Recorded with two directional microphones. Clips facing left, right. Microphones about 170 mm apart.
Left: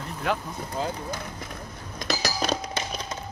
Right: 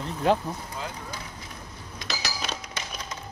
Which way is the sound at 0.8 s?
35° left (ahead or behind).